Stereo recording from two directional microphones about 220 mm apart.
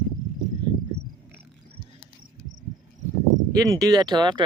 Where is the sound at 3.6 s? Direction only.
15° right (ahead or behind).